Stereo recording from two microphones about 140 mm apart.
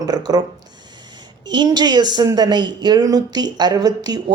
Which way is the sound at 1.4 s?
30° right (ahead or behind).